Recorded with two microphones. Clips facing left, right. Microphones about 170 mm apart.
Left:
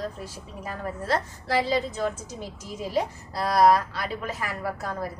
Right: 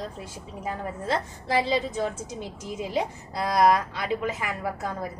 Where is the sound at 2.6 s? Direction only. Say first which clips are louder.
Left 1 dB; 20° right (ahead or behind).